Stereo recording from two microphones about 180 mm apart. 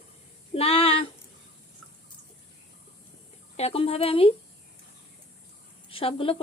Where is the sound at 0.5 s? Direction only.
35° left (ahead or behind).